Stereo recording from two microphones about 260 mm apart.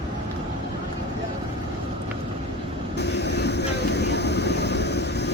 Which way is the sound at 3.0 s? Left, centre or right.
Left.